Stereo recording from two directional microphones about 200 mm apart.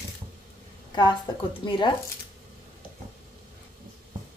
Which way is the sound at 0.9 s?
20° left (ahead or behind).